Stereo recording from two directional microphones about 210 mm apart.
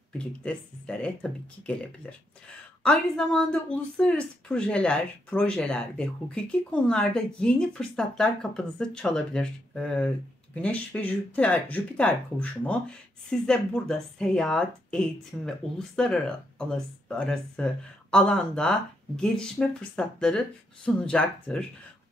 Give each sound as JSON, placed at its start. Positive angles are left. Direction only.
{"t": 0.2, "sound": "speech", "side_deg": 5}